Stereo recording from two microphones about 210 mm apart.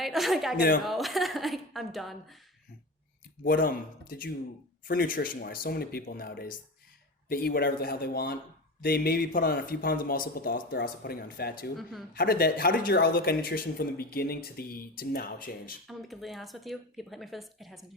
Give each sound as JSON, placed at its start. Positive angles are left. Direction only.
{"t": 0.0, "sound": "speech", "side_deg": 0}
{"t": 0.5, "sound": "speech", "side_deg": 40}
{"t": 0.8, "sound": "speech", "side_deg": 0}
{"t": 3.4, "sound": "speech", "side_deg": 45}
{"t": 11.8, "sound": "speech", "side_deg": 0}
{"t": 12.1, "sound": "speech", "side_deg": 45}
{"t": 15.9, "sound": "speech", "side_deg": 0}